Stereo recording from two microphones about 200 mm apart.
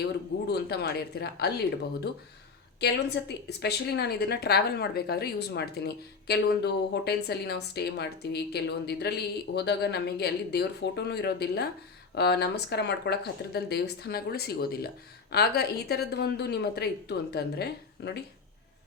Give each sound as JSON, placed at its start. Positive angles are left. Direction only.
{"t": 0.4, "sound": "speech", "side_deg": 55}
{"t": 2.8, "sound": "a woman's voice", "side_deg": 55}